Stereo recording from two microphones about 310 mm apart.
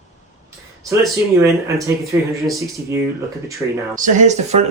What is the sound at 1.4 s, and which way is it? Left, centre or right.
Speech, centre.